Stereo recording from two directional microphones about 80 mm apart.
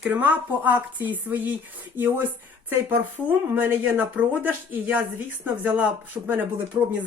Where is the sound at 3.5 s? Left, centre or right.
Right.